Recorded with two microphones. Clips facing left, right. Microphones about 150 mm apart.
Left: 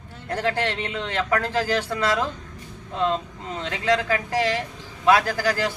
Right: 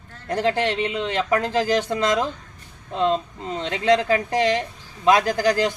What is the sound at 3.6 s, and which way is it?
Speech, 25° right (ahead or behind).